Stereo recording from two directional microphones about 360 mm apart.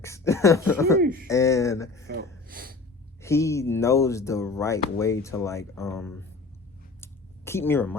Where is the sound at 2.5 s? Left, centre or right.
Right.